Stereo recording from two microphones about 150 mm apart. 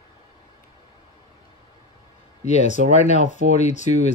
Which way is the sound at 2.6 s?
50° left (ahead or behind).